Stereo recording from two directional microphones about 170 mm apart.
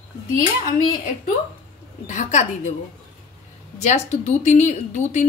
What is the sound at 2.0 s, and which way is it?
Speech, 45° left (ahead or behind).